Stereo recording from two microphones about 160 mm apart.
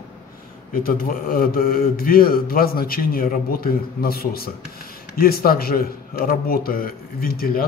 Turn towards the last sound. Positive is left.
turn(degrees=65)  # may be behind; listen again after turning